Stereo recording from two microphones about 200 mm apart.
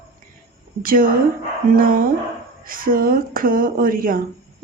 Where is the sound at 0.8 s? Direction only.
45° right (ahead or behind).